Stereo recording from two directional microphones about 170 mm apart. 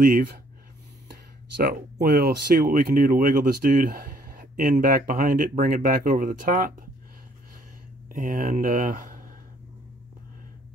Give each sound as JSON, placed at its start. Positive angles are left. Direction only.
{"t": 0.0, "sound": "speech", "side_deg": -60}
{"t": 8.1, "sound": "speech", "side_deg": -55}